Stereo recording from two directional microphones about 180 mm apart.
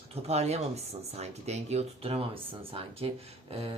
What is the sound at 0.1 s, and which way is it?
Speech, 35° right (ahead or behind).